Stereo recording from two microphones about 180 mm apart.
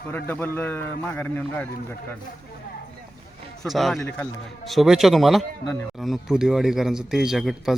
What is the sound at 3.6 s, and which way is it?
Speech, centre (ahead or behind).